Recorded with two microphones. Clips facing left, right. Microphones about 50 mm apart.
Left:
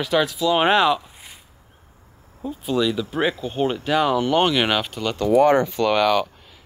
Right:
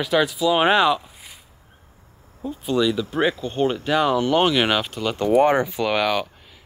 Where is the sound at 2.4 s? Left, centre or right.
Centre.